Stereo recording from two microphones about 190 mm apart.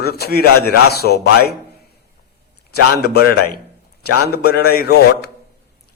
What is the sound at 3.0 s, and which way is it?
A man's voice, 55° left (ahead or behind).